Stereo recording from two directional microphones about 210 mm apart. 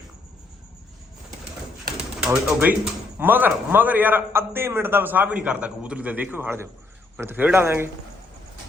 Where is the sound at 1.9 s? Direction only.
5° right (ahead or behind).